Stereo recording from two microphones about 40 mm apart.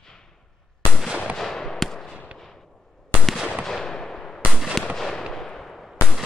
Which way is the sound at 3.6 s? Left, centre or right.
Centre.